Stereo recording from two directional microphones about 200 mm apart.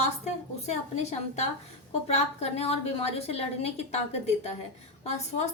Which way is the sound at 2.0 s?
30° left (ahead or behind).